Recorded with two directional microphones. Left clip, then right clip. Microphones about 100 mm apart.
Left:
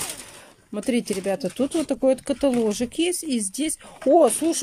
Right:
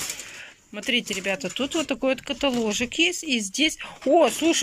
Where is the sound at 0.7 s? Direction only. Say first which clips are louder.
Even; 55° left (ahead or behind).